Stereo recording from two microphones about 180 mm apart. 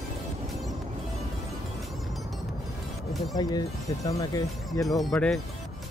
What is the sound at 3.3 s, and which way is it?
Speech, 20° left (ahead or behind).